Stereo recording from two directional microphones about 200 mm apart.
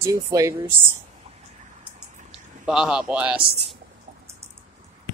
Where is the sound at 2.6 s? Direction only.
5° right (ahead or behind).